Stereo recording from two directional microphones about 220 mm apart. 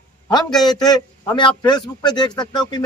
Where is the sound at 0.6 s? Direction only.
20° left (ahead or behind).